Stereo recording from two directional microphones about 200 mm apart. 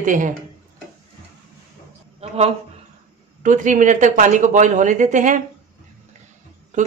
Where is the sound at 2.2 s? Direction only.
30° right (ahead or behind).